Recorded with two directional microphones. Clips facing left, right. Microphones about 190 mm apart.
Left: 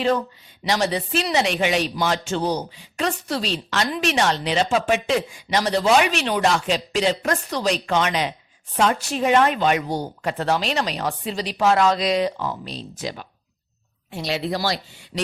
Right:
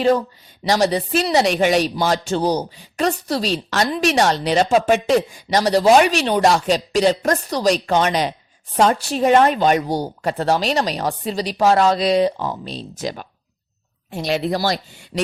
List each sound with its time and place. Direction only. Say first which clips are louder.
0.7 s a man's voice: right 5 dB; 40° right (ahead or behind)
13.0 s speech: right 5 dB; 45° right (ahead or behind)